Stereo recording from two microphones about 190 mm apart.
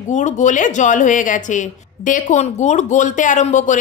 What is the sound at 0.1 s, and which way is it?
Speech, 40° left (ahead or behind).